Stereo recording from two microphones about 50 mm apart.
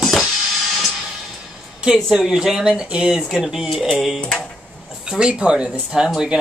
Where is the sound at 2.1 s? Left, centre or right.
Centre.